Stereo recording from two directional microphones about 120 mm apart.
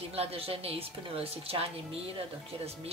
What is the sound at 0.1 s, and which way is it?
A woman's voice, 55° right (ahead or behind).